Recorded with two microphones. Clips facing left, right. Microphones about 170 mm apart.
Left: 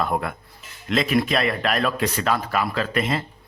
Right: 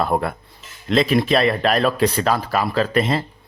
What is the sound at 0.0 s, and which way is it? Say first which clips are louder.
A man's voice: right 4 dB; 35° right (ahead or behind).